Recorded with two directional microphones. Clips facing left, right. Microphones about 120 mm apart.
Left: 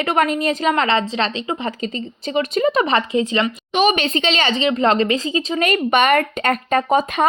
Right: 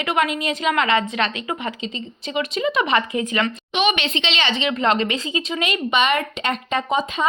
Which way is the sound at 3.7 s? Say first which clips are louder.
Left 5 dB; 40° left (ahead or behind).